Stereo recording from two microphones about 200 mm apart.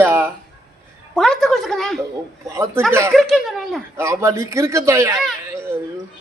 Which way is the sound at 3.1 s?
Centre (ahead or behind).